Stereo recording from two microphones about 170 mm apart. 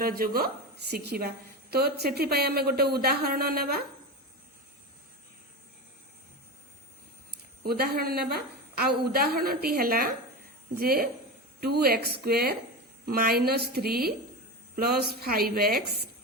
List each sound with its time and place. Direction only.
0.0 s a woman's voice: 60° right (ahead or behind)
7.3 s a woman's voice: 65° right (ahead or behind)